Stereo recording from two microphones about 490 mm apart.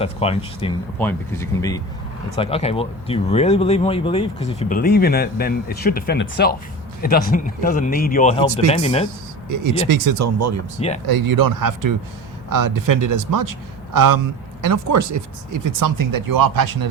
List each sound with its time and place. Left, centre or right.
0.0 s speech: centre
9.9 s speech: right
10.8 s speech: centre
11.1 s speech: right